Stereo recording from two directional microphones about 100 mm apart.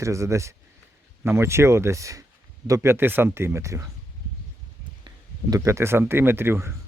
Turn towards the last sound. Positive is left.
turn(degrees=-25)  # may be behind; listen again after turning